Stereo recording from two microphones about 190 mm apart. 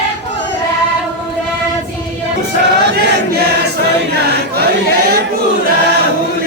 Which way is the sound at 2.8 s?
65° right (ahead or behind).